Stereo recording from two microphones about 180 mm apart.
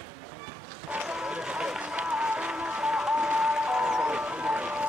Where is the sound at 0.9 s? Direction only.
5° right (ahead or behind).